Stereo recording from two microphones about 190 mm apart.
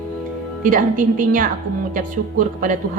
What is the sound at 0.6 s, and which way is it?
Speech, 45° right (ahead or behind).